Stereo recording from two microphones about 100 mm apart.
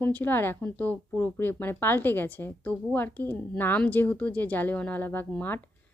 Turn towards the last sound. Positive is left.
turn(degrees=20)  # may be behind; listen again after turning